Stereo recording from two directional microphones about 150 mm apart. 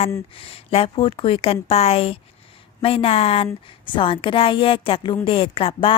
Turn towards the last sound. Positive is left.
turn(degrees=35)  # may be behind; listen again after turning